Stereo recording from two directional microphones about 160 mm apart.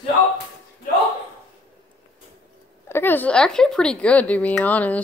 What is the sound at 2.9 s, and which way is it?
A woman's voice, 10° left (ahead or behind).